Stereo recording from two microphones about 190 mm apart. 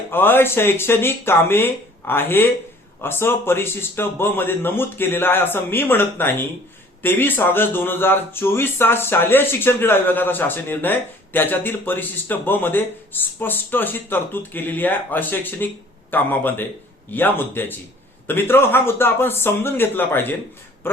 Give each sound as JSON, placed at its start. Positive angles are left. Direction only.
{"t": 0.1, "sound": "speech", "side_deg": 10}
{"t": 20.8, "sound": "quack", "side_deg": 10}